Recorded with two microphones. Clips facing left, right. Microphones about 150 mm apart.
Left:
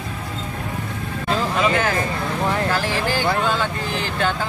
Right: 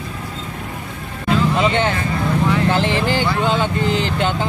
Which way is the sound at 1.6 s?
25° right (ahead or behind).